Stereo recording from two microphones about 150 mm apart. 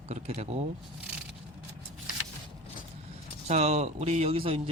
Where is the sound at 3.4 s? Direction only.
45° right (ahead or behind).